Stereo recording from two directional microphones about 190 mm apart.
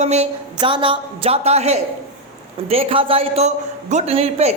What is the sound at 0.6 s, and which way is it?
A man's voice, 25° right (ahead or behind).